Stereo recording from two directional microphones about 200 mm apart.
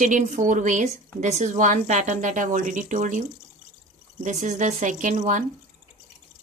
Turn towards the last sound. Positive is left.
turn(degrees=-40)  # may be behind; listen again after turning